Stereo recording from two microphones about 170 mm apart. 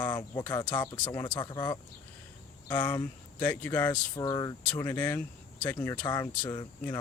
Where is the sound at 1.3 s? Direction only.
25° left (ahead or behind).